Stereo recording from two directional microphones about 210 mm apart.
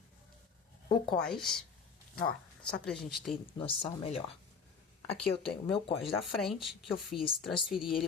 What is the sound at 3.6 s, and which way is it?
Speech, 25° left (ahead or behind).